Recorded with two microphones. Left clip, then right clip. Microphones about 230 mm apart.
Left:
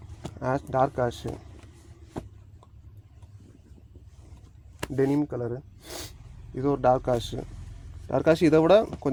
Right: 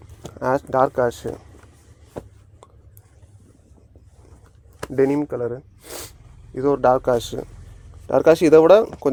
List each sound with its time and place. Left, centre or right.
0.3 s speech: right
4.9 s speech: right